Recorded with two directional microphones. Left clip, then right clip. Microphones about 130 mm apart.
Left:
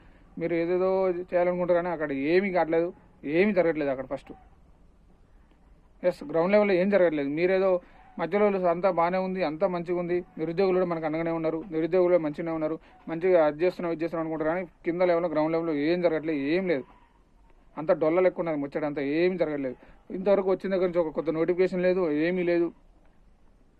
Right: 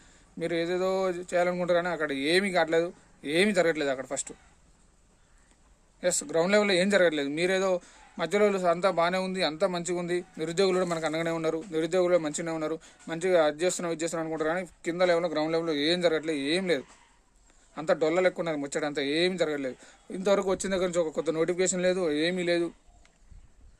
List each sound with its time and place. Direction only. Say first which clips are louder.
0.3 s speech: left 2 dB; 25° right (ahead or behind)
6.0 s speech: left 1 dB; 30° right (ahead or behind)